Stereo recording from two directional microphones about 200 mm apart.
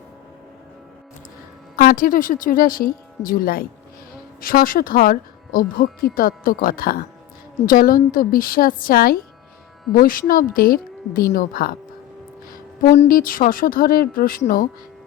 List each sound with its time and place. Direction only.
1.7 s speech: 45° left (ahead or behind)